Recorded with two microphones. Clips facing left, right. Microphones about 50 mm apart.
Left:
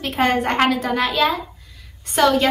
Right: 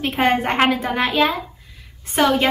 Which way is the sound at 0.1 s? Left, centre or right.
Centre.